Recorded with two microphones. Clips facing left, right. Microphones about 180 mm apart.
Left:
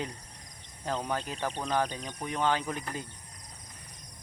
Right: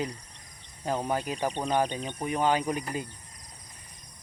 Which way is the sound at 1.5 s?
30° right (ahead or behind).